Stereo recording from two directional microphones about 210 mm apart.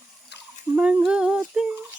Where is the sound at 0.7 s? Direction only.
5° right (ahead or behind).